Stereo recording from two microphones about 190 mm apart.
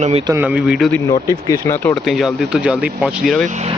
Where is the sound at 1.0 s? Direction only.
15° left (ahead or behind).